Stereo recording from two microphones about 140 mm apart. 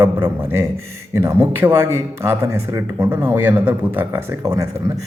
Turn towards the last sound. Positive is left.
turn(degrees=-20)  # may be behind; listen again after turning